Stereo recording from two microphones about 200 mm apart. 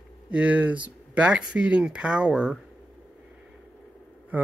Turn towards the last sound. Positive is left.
turn(degrees=-10)  # may be behind; listen again after turning